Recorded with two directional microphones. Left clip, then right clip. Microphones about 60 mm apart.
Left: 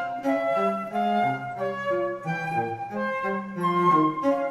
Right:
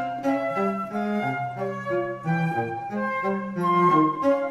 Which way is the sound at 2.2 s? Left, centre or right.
Right.